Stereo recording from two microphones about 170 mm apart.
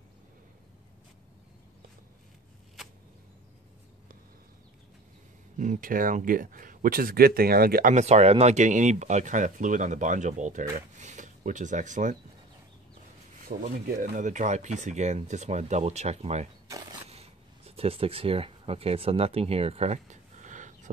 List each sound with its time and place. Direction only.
5.6 s speech: 50° right (ahead or behind)
7.9 s speech: 40° right (ahead or behind)
13.5 s speech: 60° right (ahead or behind); by 16.4 s 40° right (ahead or behind)
17.1 s a sound: 35° right (ahead or behind)